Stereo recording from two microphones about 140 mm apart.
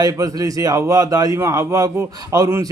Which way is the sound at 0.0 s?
25° right (ahead or behind).